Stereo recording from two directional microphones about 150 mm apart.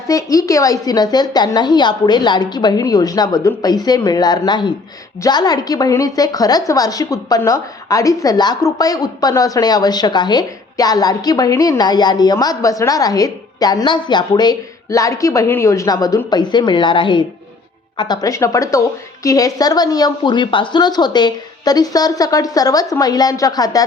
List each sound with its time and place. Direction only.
0.1 s a woman's voice: 20° left (ahead or behind)